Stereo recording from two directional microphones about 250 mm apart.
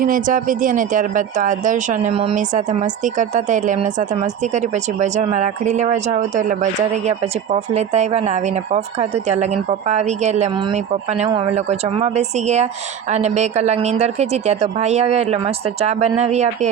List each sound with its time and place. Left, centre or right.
0.0 s speech: right